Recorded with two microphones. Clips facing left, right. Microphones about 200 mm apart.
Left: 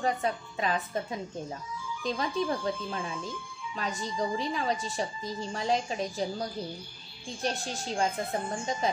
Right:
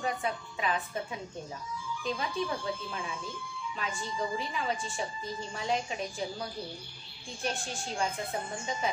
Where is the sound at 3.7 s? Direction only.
40° left (ahead or behind).